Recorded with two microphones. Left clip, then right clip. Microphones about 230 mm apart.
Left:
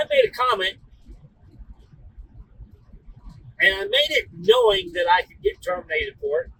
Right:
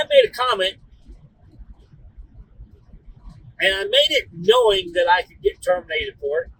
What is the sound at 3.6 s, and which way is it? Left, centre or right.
Speech, centre.